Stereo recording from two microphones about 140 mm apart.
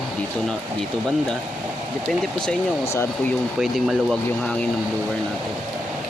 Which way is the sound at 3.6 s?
Centre (ahead or behind).